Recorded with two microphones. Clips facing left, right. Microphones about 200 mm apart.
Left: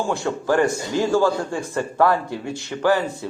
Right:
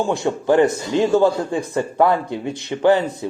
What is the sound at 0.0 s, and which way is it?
Speech, 20° right (ahead or behind).